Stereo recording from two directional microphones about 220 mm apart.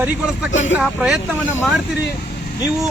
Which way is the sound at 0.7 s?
5° right (ahead or behind).